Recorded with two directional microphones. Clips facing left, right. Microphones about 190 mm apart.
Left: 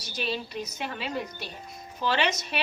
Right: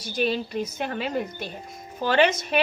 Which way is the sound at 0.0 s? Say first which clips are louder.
Right 7 dB; 50° right (ahead or behind).